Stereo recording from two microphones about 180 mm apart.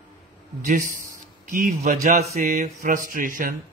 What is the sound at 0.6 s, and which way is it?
A man's voice, 45° right (ahead or behind).